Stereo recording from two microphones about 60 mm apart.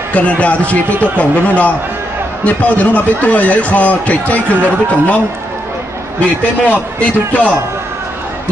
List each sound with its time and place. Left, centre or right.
0.1 s speech: left
6.7 s speech: left